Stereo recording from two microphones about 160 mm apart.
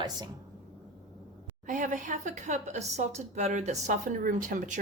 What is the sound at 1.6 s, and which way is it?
A woman's voice, 50° right (ahead or behind).